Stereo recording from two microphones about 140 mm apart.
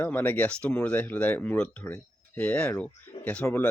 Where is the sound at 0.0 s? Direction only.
10° left (ahead or behind).